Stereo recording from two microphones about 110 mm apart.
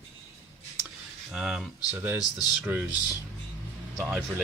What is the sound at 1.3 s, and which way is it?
Speech, 5° right (ahead or behind).